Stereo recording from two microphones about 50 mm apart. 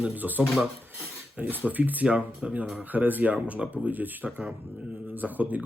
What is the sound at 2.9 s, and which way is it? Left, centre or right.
Speech, right.